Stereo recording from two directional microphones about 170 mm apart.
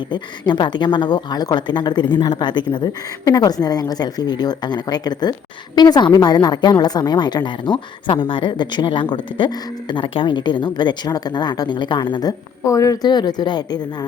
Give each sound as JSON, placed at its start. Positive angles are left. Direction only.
{"t": 0.1, "sound": "speech", "side_deg": 25}